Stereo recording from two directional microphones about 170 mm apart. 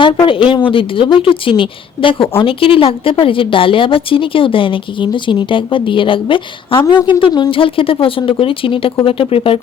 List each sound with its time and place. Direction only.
0.0 s a woman's voice: 30° left (ahead or behind)